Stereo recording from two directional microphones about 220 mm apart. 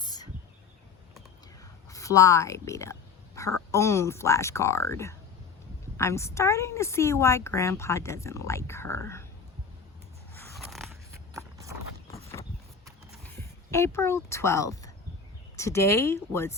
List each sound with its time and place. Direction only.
0.0 s a sound: 20° left (ahead or behind)
1.9 s speech: 15° left (ahead or behind)
10.3 s biting: centre (ahead or behind)
11.3 s clip-clop: 15° right (ahead or behind)
13.2 s speech: 10° left (ahead or behind)